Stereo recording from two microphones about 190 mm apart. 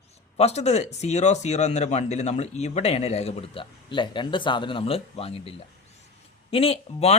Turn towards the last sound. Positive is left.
turn(degrees=30)  # may be behind; listen again after turning